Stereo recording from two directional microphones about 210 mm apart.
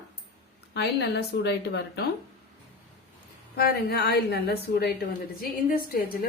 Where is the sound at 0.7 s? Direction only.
55° left (ahead or behind).